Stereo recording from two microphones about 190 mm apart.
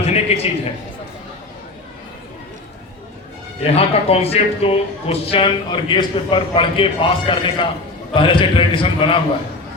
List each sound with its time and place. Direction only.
0.0 s a man's voice: 30° left (ahead or behind)
3.6 s speech: 30° left (ahead or behind)